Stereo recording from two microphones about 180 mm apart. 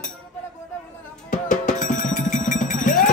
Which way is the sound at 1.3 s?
45° left (ahead or behind).